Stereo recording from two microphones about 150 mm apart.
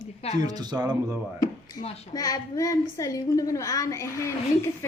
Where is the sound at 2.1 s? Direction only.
25° left (ahead or behind).